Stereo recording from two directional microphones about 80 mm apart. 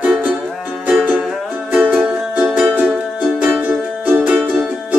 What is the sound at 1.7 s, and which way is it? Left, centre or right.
Music, centre.